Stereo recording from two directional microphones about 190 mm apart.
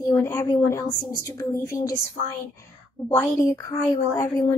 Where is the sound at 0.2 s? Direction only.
15° left (ahead or behind).